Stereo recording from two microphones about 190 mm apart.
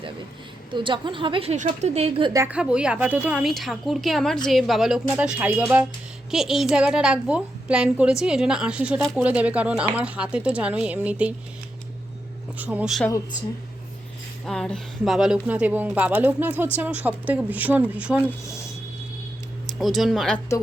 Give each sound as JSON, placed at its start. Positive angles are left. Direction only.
{"t": 0.7, "sound": "a woman's voice", "side_deg": -25}
{"t": 2.5, "sound": "a woman's voice", "side_deg": -5}
{"t": 12.5, "sound": "a woman's voice", "side_deg": -10}
{"t": 14.4, "sound": "speech", "side_deg": 0}
{"t": 19.6, "sound": "speech", "side_deg": 0}